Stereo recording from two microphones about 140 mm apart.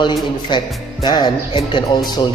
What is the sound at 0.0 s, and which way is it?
A man's voice, 35° left (ahead or behind).